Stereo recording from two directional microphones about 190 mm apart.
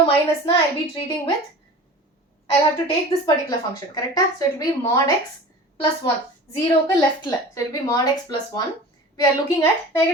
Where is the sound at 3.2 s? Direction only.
20° left (ahead or behind).